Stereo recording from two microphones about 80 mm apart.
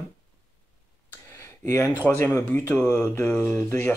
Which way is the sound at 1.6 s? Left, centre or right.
Left.